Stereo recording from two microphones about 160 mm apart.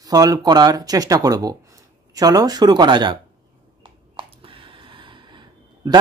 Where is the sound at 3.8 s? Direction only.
30° right (ahead or behind).